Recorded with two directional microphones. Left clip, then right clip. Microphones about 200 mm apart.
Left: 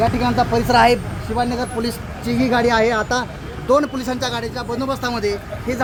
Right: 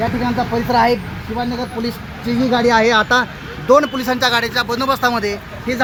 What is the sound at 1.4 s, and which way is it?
Speech, 20° right (ahead or behind).